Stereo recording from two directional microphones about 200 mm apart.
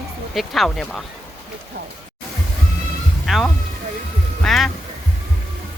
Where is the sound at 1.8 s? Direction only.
50° right (ahead or behind).